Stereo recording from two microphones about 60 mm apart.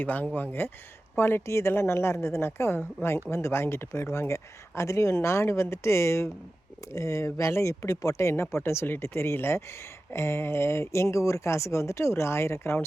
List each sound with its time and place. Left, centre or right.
0.0 s speech: left
8.3 s speech: left